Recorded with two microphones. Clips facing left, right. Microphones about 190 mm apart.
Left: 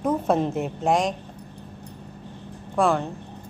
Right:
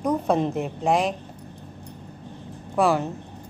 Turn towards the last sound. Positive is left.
turn(degrees=-5)  # may be behind; listen again after turning